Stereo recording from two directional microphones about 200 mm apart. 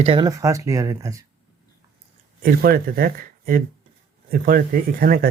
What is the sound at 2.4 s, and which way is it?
Speech, 50° right (ahead or behind).